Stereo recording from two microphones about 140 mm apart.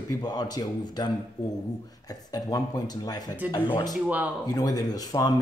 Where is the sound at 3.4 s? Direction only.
10° right (ahead or behind).